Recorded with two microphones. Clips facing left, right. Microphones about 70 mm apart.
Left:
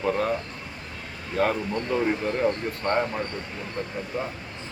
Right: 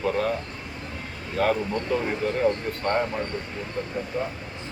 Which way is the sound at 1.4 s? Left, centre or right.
Centre.